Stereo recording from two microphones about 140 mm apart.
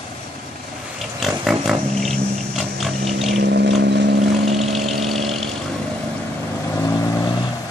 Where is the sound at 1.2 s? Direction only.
Centre (ahead or behind).